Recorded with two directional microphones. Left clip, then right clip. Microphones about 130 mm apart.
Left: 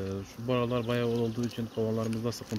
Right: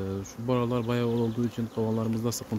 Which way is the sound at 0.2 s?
30° right (ahead or behind).